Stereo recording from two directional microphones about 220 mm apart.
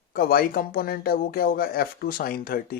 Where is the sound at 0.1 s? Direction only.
40° left (ahead or behind).